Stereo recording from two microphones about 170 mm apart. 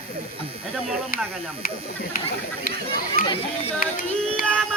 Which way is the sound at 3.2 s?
30° left (ahead or behind).